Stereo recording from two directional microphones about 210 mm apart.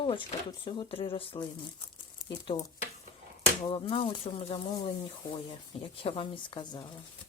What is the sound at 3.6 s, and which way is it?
Speech, 25° left (ahead or behind).